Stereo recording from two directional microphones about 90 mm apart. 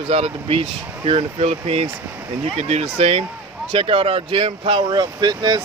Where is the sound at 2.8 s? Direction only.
90° right.